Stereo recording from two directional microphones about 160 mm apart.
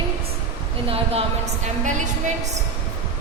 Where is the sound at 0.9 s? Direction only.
35° right (ahead or behind).